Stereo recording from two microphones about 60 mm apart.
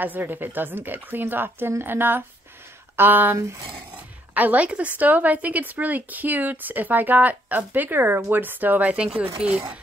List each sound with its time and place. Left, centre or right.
0.0 s a woman's voice: right; by 9.6 s centre